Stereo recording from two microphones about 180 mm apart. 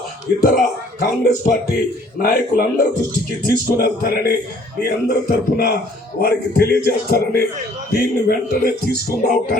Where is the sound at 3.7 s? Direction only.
55° left (ahead or behind).